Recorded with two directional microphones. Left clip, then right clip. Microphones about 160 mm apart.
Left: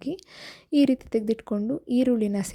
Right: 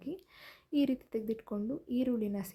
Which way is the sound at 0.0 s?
40° left (ahead or behind).